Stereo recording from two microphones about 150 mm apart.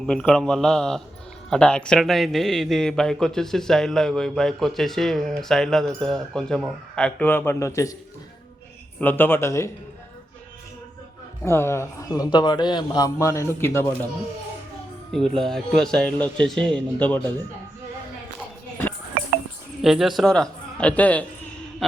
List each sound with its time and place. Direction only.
0.0 s a man's voice: 5° left (ahead or behind); by 7.9 s 20° left (ahead or behind)
9.0 s speech: 15° left (ahead or behind)
11.4 s a man's voice: 15° left (ahead or behind)
15.1 s a man's voice: 5° left (ahead or behind)
19.8 s a man's voice: centre (ahead or behind)